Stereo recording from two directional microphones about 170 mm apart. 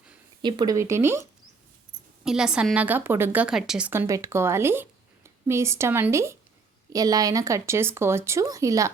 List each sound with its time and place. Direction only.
0.4 s a woman's voice: 25° right (ahead or behind)
2.2 s a woman's voice: 5° right (ahead or behind); by 8.9 s 20° right (ahead or behind)